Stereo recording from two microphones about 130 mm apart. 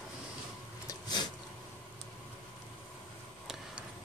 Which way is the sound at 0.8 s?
30° left (ahead or behind).